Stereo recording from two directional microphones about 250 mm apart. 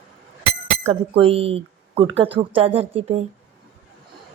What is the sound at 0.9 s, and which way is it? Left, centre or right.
Speech, right.